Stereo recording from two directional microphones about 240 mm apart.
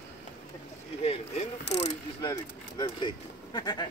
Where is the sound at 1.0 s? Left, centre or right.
Left.